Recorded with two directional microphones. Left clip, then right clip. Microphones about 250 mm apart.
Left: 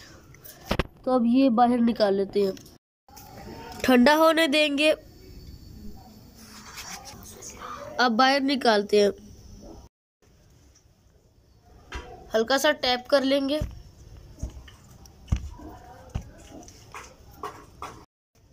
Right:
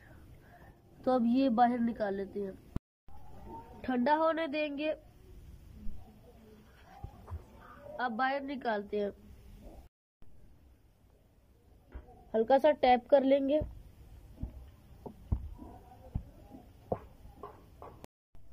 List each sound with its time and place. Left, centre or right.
1.0 s a woman's voice: centre
3.8 s a woman's voice: centre
7.9 s a woman's voice: centre
12.3 s a woman's voice: centre